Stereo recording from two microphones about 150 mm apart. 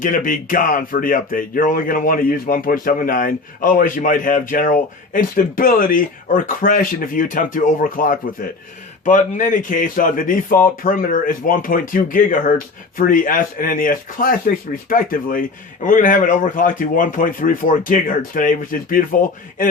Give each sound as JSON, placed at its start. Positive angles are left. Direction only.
{"t": 0.0, "sound": "speech", "side_deg": 60}